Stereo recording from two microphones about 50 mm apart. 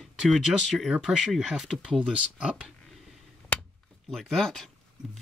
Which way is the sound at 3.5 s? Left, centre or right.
Left.